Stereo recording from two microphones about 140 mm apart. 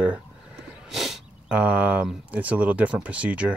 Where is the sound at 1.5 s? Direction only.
10° right (ahead or behind).